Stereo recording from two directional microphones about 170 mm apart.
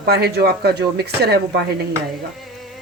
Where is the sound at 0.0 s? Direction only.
70° right (ahead or behind).